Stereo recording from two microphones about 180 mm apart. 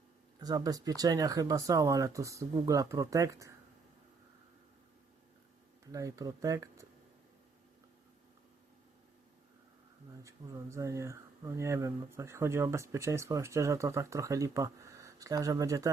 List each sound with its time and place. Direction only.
0.3 s speech: 20° right (ahead or behind)
5.9 s speech: 20° right (ahead or behind)
10.2 s speech: 15° right (ahead or behind)